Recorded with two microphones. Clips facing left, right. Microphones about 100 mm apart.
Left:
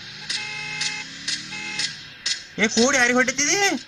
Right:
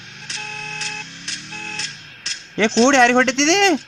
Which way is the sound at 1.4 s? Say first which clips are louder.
Right 5 dB; 40° right (ahead or behind).